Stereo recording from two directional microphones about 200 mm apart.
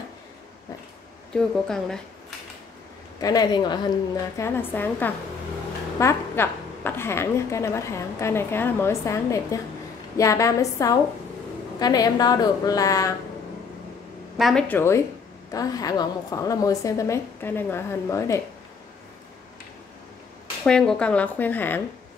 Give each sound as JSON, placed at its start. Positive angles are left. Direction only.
{"t": 1.3, "sound": "a woman's voice", "side_deg": 5}
{"t": 3.2, "sound": "a woman's voice", "side_deg": 20}
{"t": 4.4, "sound": "a woman's voice", "side_deg": 10}
{"t": 14.4, "sound": "a woman's voice", "side_deg": 5}
{"t": 20.6, "sound": "a woman's voice", "side_deg": 5}